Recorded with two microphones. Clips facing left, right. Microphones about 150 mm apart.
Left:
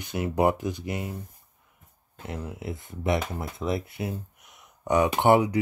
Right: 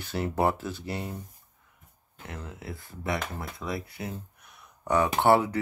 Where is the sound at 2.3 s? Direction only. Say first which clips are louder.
Left 5 dB; 20° left (ahead or behind).